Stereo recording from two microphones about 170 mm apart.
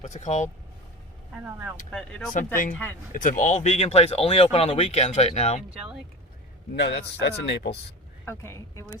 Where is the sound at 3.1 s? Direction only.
50° left (ahead or behind).